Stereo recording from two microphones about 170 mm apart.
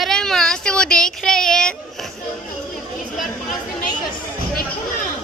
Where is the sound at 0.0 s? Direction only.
5° left (ahead or behind).